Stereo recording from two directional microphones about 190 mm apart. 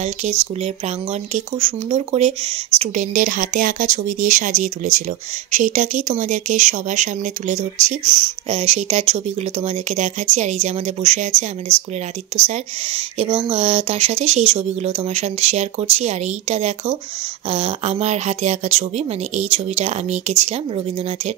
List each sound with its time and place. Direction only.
0.0 s speech: 35° right (ahead or behind)
8.0 s speech: 25° right (ahead or behind)
12.4 s speech: 30° right (ahead or behind)